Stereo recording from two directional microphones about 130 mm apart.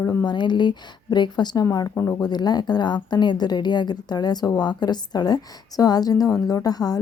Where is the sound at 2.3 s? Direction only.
30° left (ahead or behind).